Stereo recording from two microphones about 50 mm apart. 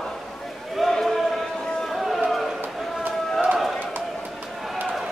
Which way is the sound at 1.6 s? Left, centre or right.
Centre.